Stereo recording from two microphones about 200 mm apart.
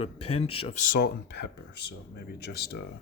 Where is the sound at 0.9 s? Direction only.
50° left (ahead or behind).